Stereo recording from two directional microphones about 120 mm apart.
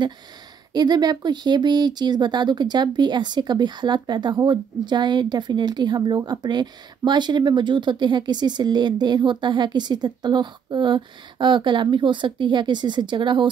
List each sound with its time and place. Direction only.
0.7 s speech: 35° right (ahead or behind)